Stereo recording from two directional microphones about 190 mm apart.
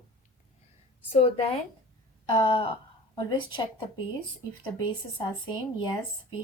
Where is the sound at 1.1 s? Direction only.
30° left (ahead or behind).